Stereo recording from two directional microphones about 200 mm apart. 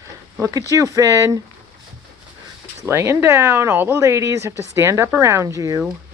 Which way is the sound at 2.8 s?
15° right (ahead or behind).